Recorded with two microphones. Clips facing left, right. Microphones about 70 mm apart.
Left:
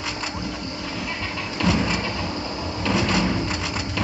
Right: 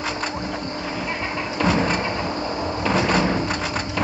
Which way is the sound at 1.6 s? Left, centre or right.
Right.